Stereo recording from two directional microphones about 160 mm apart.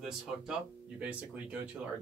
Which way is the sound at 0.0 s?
5° right (ahead or behind).